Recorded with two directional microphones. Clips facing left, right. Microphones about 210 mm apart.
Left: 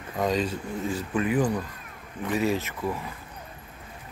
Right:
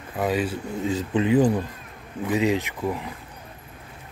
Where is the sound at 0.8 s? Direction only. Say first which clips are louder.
Right 5 dB; 20° right (ahead or behind).